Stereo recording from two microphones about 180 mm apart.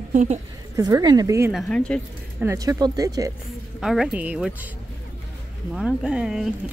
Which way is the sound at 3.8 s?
5° right (ahead or behind).